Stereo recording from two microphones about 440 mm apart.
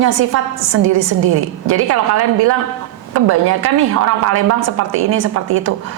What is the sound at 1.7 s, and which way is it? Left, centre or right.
Speech, right.